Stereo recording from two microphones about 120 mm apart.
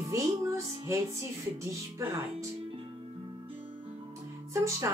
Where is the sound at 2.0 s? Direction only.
25° right (ahead or behind).